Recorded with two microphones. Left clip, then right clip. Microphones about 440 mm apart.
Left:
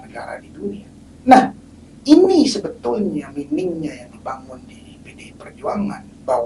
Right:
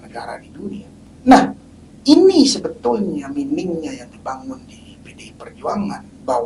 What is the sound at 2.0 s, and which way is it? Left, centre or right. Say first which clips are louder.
Speech: right 1 dB; centre.